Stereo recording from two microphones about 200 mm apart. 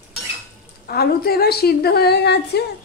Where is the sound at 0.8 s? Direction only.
50° left (ahead or behind).